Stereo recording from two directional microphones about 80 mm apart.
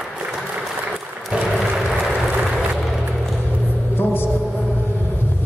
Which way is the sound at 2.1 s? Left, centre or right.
Centre.